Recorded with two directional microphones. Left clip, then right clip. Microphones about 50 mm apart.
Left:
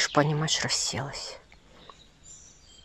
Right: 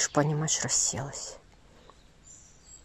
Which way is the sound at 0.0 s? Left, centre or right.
Centre.